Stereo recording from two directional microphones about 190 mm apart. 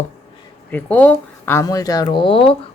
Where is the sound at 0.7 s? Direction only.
10° left (ahead or behind).